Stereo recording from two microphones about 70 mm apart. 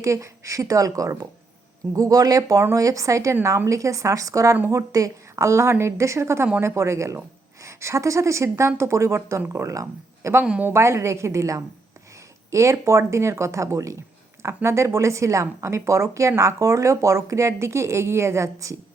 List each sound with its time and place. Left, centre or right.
0.0 s a woman's voice: right